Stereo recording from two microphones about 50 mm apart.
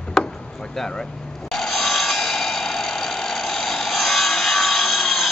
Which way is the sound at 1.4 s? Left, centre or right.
Centre.